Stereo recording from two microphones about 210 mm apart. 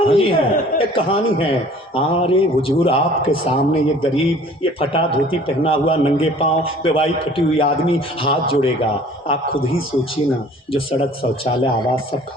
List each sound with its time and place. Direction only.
0.0 s a man's voice: 25° left (ahead or behind)
10.7 s a man's voice: 25° left (ahead or behind)